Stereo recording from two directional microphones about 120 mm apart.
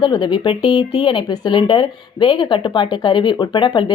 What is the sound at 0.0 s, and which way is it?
Speech, 40° left (ahead or behind).